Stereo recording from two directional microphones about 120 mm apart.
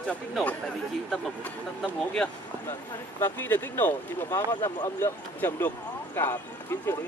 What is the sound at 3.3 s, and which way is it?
Speech, 15° left (ahead or behind).